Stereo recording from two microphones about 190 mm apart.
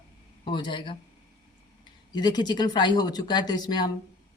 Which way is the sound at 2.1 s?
20° left (ahead or behind).